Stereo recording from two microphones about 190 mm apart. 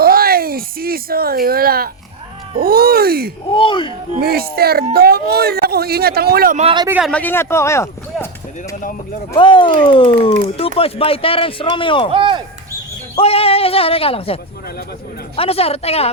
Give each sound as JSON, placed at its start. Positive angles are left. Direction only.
{"t": 0.0, "sound": "a sound", "side_deg": -50}
{"t": 2.6, "sound": "speech", "side_deg": -55}
{"t": 3.5, "sound": "speech", "side_deg": 25}
{"t": 4.2, "sound": "speech", "side_deg": -55}
{"t": 6.6, "sound": "speech", "side_deg": -30}
{"t": 6.8, "sound": "speech", "side_deg": -10}
{"t": 7.1, "sound": "speech", "side_deg": 10}
{"t": 9.3, "sound": "speech", "side_deg": 25}
{"t": 12.1, "sound": "speech", "side_deg": -25}
{"t": 13.1, "sound": "speech", "side_deg": 30}
{"t": 15.4, "sound": "speech", "side_deg": 30}